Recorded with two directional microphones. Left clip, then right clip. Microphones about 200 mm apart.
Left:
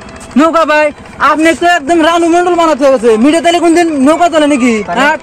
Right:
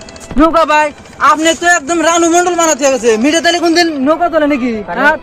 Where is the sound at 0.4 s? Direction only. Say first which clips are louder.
Left 1 dB; 45° left (ahead or behind).